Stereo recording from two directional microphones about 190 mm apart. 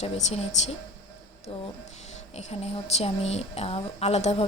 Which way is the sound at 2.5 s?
35° left (ahead or behind).